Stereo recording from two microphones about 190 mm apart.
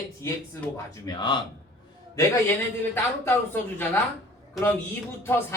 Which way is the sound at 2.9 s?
10° left (ahead or behind).